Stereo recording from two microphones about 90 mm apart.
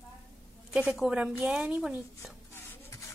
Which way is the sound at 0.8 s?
5° right (ahead or behind).